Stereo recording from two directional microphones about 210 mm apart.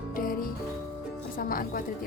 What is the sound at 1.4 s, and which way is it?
Speech, 40° left (ahead or behind).